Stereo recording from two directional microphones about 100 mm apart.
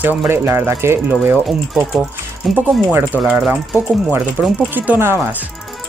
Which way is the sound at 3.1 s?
20° left (ahead or behind).